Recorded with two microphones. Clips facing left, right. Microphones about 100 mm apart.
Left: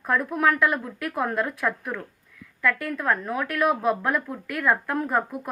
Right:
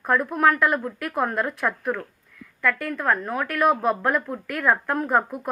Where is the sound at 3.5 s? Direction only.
45° right (ahead or behind).